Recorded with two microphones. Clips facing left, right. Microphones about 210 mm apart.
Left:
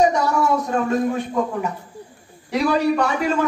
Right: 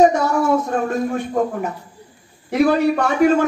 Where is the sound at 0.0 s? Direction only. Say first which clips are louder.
Right 3 dB; 50° right (ahead or behind).